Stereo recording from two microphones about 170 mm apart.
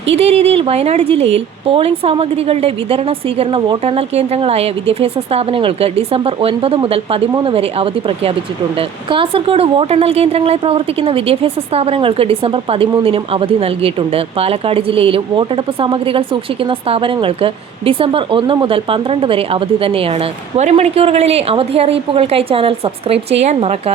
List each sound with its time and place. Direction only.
0.2 s a woman's voice: 35° right (ahead or behind)